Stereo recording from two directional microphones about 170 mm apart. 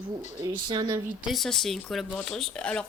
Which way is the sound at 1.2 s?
Centre (ahead or behind).